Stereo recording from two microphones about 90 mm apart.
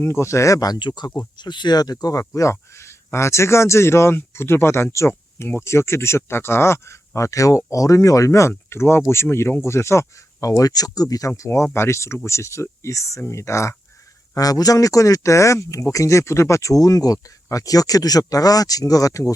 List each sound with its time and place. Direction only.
0.0 s speech: 30° left (ahead or behind)
11.3 s speech: 30° left (ahead or behind)
14.3 s speech: 45° left (ahead or behind)